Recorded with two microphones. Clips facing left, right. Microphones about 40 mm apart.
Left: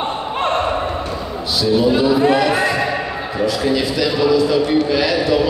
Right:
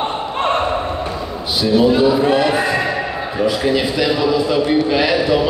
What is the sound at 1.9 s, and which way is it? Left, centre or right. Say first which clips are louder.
Speech: right 1 dB; centre.